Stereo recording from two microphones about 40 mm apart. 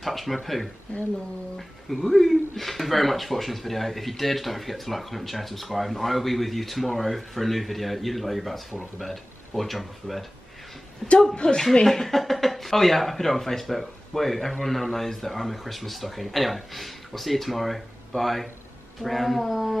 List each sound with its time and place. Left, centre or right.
0.0 s speech: centre
0.9 s speech: left
2.0 s a woman's voice: centre
11.4 s speech: centre